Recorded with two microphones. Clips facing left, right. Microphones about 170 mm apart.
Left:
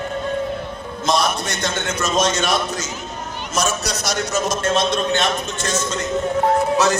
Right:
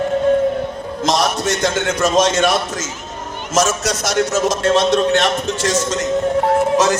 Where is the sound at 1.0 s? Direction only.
80° right; by 2.5 s 60° right (ahead or behind).